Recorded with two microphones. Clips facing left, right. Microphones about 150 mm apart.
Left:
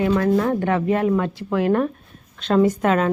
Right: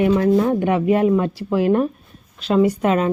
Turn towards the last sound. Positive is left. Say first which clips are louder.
# right 1 dB
turn(degrees=-5)  # may be behind; listen again after turning